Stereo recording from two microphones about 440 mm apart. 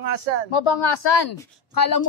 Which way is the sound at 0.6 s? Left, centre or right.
Left.